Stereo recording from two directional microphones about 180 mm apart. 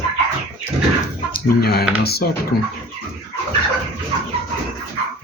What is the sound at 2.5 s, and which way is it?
Speech, 55° left (ahead or behind).